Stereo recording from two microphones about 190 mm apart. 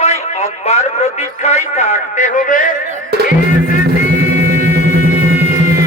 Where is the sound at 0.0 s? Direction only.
35° left (ahead or behind).